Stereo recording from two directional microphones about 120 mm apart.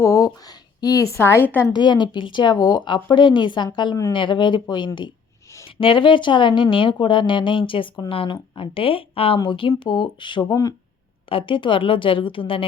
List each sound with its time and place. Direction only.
0.0 s a woman's voice: 25° left (ahead or behind)
1.7 s speech: 40° left (ahead or behind)